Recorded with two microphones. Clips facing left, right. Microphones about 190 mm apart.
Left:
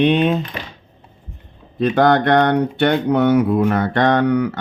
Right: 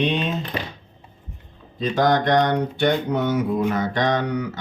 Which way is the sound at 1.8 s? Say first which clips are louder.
Left 5 dB; 60° left (ahead or behind).